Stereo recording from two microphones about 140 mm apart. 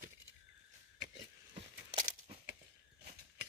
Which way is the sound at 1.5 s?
45° right (ahead or behind).